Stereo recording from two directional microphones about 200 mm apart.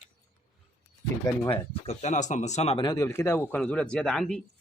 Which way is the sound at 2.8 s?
15° left (ahead or behind).